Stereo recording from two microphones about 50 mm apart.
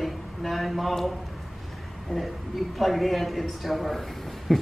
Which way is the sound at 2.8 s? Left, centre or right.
Centre.